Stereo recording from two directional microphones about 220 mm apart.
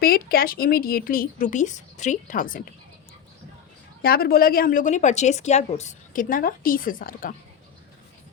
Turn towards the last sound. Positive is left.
turn(degrees=40)  # may be behind; listen again after turning